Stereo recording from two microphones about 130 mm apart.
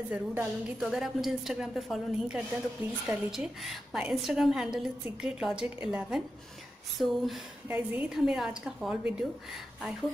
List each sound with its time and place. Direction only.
0.1 s a woman's voice: 15° right (ahead or behind)
0.7 s a woman's voice: 5° right (ahead or behind)
7.6 s a woman's voice: 15° right (ahead or behind)